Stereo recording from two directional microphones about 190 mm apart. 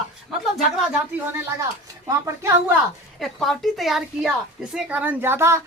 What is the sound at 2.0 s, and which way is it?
Speech, 15° right (ahead or behind).